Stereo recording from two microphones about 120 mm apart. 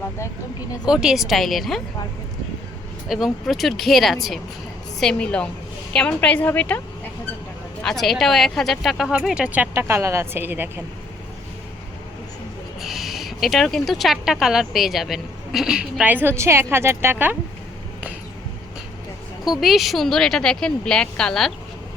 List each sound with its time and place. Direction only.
0.9 s speech: 5° right (ahead or behind)
3.1 s a woman's voice: 5° right (ahead or behind); by 6.8 s 15° left (ahead or behind)
7.8 s speech: 5° left (ahead or behind)
9.7 s speech: 20° right (ahead or behind)
12.8 s speech: centre (ahead or behind); by 17.3 s 15° right (ahead or behind)
19.5 s speech: centre (ahead or behind)